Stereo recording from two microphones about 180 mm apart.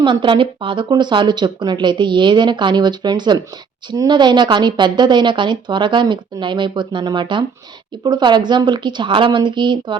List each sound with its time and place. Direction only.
0.0 s speech: 25° right (ahead or behind)